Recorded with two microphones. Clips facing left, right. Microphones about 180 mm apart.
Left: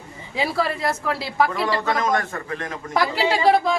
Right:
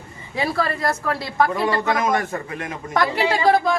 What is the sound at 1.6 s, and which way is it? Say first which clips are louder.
A man's voice: right 2 dB; 20° right (ahead or behind).